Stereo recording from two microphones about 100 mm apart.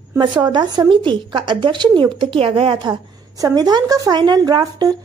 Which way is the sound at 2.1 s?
65° right (ahead or behind).